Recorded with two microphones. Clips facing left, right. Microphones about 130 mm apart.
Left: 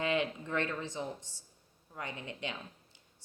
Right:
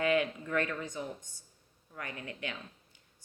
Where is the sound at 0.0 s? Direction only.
25° left (ahead or behind).